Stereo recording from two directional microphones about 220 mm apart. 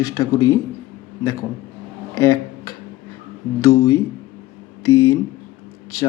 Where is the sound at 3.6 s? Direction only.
15° left (ahead or behind).